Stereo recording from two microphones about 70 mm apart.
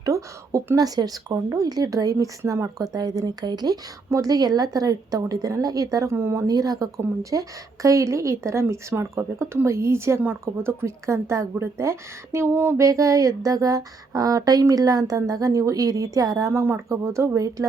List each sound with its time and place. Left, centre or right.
0.0 s a woman's voice: right
4.1 s speech: right
12.8 s speech: right
16.5 s speech: right